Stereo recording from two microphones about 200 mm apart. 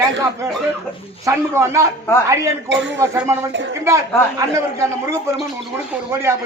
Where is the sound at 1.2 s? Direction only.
15° right (ahead or behind).